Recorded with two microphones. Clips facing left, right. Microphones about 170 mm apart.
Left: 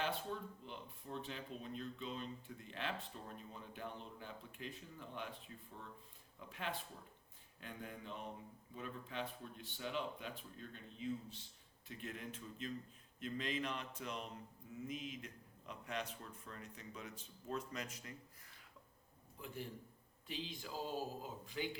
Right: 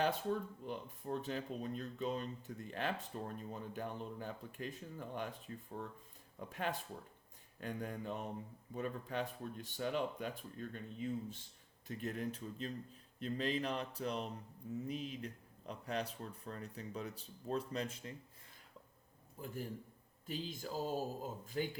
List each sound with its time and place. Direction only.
0.0 s speech: 45° right (ahead or behind); by 18.1 s 30° right (ahead or behind)
19.4 s speech: 40° right (ahead or behind)